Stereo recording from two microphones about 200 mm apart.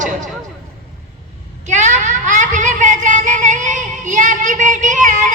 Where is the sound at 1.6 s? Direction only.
35° right (ahead or behind).